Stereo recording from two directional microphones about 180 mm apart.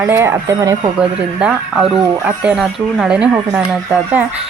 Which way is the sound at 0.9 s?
5° right (ahead or behind).